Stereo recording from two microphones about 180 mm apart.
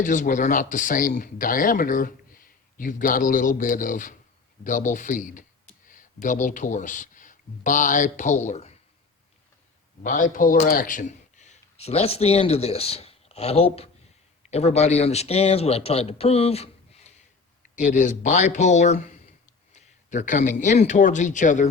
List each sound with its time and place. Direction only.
0.0 s speech: 45° left (ahead or behind)
10.0 s a man's voice: 50° left (ahead or behind)